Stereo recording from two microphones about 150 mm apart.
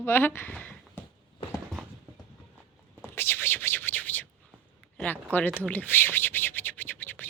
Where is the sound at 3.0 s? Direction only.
15° left (ahead or behind).